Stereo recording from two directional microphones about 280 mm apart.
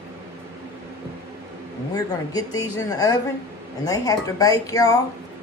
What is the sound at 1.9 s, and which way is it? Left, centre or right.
Speech, centre.